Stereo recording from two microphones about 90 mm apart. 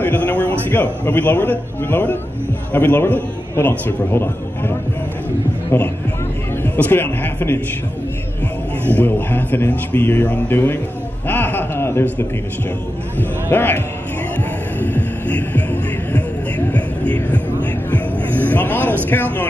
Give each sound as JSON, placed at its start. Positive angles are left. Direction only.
{"t": 0.0, "sound": "a man's voice", "side_deg": 20}
{"t": 6.6, "sound": "a man's voice", "side_deg": 25}
{"t": 8.8, "sound": "a man's voice", "side_deg": 20}
{"t": 11.2, "sound": "chuckle", "side_deg": 20}
{"t": 13.5, "sound": "a man's voice", "side_deg": 20}
{"t": 14.8, "sound": "music", "side_deg": 20}
{"t": 18.5, "sound": "a sound", "side_deg": 20}
{"t": 19.0, "sound": "a man's voice", "side_deg": 20}